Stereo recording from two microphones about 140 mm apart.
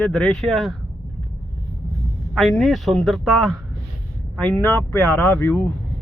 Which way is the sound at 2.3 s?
Centre (ahead or behind).